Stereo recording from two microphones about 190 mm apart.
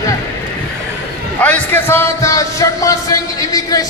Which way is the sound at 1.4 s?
10° left (ahead or behind).